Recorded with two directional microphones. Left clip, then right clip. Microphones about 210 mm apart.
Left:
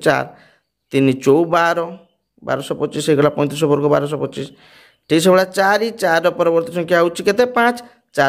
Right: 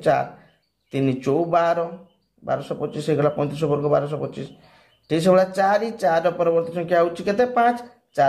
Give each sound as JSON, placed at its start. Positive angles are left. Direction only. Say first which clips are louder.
{"t": 0.0, "sound": "speech", "louder": "left 4 dB", "side_deg": 45}